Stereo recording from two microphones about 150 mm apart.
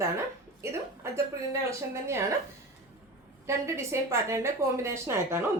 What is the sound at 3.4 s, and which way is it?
Speech, 20° right (ahead or behind).